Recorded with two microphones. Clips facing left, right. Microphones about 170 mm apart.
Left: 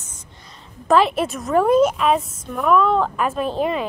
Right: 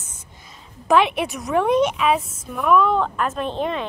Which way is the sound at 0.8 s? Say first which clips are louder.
Left 1 dB; centre (ahead or behind).